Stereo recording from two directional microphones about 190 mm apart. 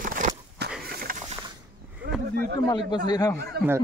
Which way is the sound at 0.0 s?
45° right (ahead or behind).